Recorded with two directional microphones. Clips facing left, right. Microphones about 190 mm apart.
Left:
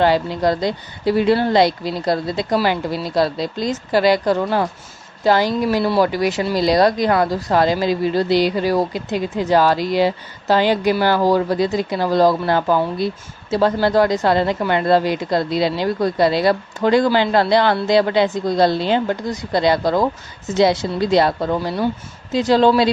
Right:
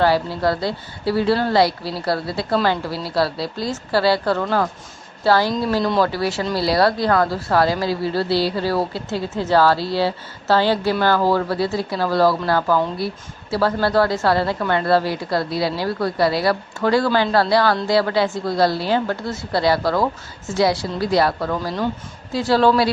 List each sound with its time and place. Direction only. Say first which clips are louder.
0.0 s a woman's voice: left 2 dB; 20° left (ahead or behind)